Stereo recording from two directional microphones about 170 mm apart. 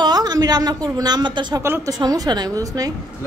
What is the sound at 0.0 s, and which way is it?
A woman's voice, 25° right (ahead or behind).